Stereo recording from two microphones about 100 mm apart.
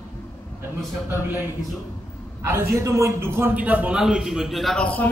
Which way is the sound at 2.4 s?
30° right (ahead or behind).